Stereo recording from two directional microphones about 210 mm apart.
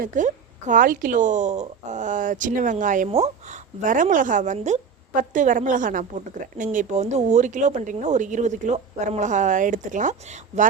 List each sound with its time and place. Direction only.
0.0 s a woman's voice: 35° right (ahead or behind)